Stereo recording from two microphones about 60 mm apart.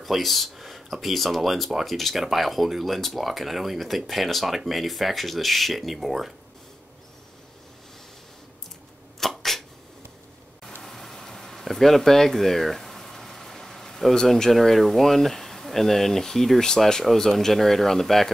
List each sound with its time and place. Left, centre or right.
0.0 s speech: centre
9.2 s a sound: centre
10.8 s speech: centre